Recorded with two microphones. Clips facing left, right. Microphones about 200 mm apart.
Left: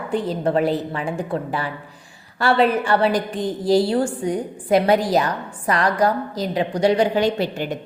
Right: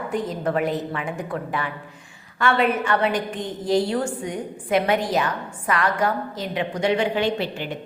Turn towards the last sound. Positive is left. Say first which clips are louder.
# left 4 dB
turn(degrees=40)  # may be behind; listen again after turning